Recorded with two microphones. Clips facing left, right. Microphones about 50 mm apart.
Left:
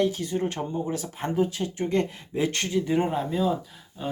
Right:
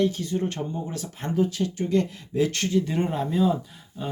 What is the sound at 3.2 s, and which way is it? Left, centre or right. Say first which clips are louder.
Speech: right 2 dB; centre.